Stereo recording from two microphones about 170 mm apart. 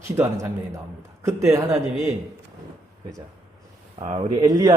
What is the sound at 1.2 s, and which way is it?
Speech, 15° right (ahead or behind).